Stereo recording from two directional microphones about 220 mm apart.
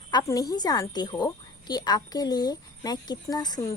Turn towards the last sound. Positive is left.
turn(degrees=20)  # may be behind; listen again after turning